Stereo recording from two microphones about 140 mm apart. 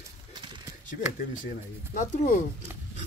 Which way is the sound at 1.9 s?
70° left (ahead or behind).